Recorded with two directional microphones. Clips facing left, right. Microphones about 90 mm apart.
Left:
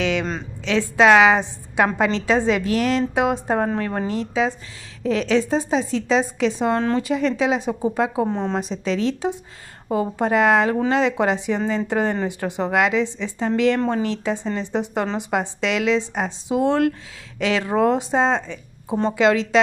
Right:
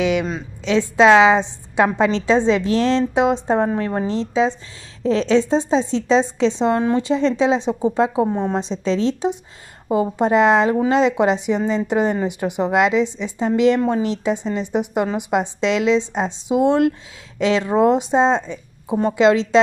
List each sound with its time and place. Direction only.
0.0 s a woman's voice: 15° right (ahead or behind)
8.3 s a woman's voice: 15° right (ahead or behind)
8.5 s a woman's voice: 25° right (ahead or behind)